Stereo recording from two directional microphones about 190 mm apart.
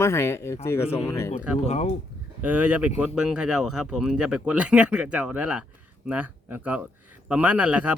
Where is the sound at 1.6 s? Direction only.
35° left (ahead or behind).